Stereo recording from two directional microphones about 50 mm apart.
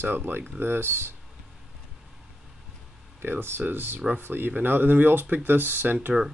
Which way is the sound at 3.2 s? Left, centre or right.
Right.